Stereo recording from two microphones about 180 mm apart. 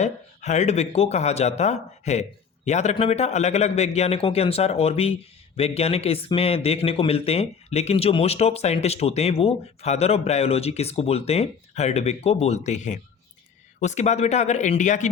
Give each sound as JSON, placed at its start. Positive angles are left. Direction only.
{"t": 0.0, "sound": "a man's voice", "side_deg": 40}